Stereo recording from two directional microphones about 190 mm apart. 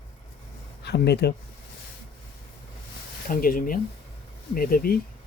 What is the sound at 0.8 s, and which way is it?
Speech, 60° left (ahead or behind).